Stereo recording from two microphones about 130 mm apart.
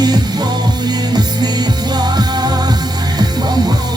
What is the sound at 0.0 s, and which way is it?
Music, 30° right (ahead or behind).